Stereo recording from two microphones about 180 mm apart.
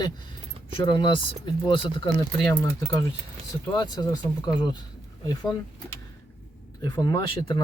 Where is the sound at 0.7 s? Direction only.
25° left (ahead or behind).